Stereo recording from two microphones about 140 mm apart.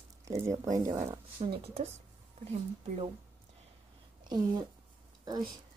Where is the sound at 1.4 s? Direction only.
45° right (ahead or behind).